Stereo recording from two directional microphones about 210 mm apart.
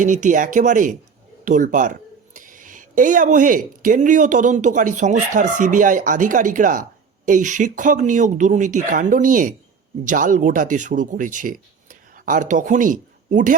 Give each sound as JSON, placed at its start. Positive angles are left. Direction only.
{"t": 0.0, "sound": "speech", "side_deg": -35}